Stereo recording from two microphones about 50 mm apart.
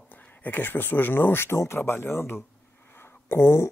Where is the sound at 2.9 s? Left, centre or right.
Left.